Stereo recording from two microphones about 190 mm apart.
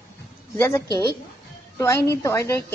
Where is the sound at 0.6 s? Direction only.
15° left (ahead or behind).